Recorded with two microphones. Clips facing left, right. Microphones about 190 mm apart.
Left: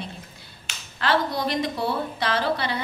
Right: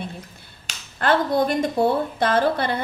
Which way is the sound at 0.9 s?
50° right (ahead or behind).